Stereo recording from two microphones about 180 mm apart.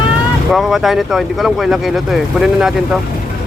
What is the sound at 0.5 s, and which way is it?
Speech, centre (ahead or behind).